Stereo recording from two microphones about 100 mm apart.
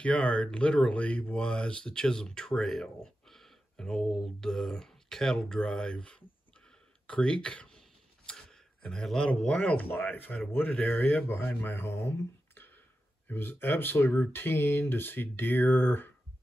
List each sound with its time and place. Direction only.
0.0 s speech: 10° left (ahead or behind)
9.8 s speech: 20° left (ahead or behind)
12.5 s a sound: 20° left (ahead or behind)
13.3 s speech: 20° left (ahead or behind)